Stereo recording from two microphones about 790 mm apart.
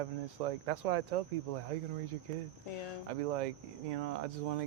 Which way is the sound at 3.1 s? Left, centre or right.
Right.